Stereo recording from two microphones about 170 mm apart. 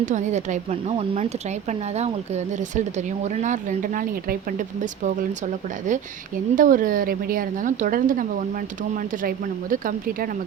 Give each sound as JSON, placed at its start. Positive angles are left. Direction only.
{"t": 0.0, "sound": "speech", "side_deg": -45}
{"t": 5.0, "sound": "a woman's voice", "side_deg": -45}